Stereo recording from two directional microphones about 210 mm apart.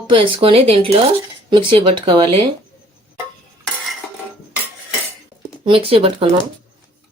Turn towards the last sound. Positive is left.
turn(degrees=-25)  # may be behind; listen again after turning